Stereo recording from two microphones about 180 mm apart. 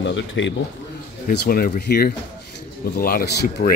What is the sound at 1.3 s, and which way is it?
A man's voice, 60° left (ahead or behind).